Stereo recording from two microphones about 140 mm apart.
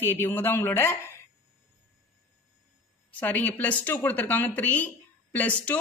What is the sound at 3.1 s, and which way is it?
A woman's voice, 10° left (ahead or behind).